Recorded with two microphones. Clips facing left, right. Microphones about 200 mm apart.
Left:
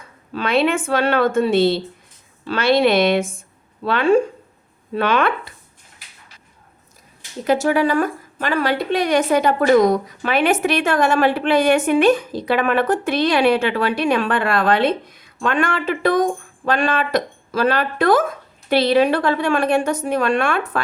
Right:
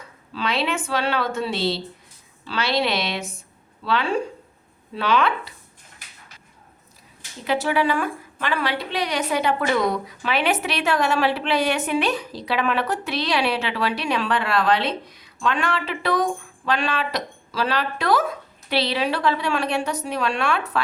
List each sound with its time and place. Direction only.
0.3 s a woman's voice: 55° left (ahead or behind)
7.4 s a woman's voice: 45° left (ahead or behind)